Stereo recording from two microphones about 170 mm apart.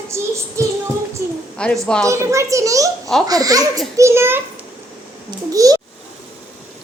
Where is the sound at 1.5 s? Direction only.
5° left (ahead or behind).